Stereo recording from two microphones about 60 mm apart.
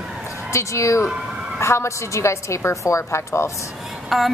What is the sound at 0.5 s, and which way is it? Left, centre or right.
A woman's voice, left.